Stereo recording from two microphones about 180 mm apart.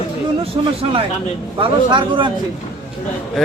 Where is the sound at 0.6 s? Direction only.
20° right (ahead or behind).